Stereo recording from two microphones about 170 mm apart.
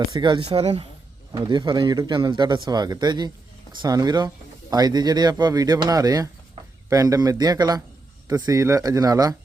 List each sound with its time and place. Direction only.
0.1 s speech: 25° right (ahead or behind)